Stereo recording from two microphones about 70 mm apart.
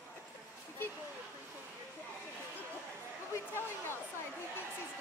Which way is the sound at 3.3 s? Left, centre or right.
Left.